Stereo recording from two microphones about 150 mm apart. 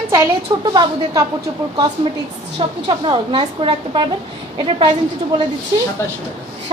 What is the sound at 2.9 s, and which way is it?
A woman's voice, 30° right (ahead or behind).